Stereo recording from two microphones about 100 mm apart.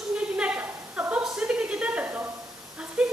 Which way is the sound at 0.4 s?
15° right (ahead or behind).